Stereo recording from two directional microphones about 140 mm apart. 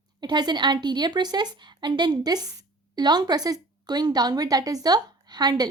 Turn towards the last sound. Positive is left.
turn(degrees=-30)  # may be behind; listen again after turning